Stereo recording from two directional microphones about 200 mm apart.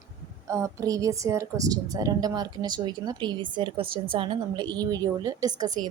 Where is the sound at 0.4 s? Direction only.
15° right (ahead or behind).